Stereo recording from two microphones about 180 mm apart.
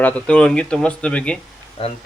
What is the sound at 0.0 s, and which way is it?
Speech, 5° left (ahead or behind).